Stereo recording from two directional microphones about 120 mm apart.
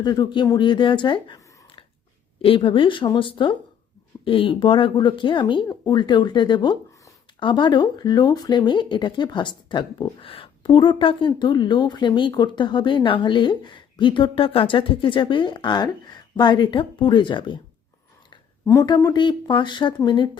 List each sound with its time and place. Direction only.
0.0 s speech: 35° left (ahead or behind)
18.6 s speech: 25° left (ahead or behind)
18.9 s speech: 35° left (ahead or behind)